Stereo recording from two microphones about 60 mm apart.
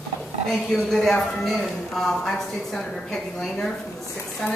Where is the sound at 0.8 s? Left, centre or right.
Centre.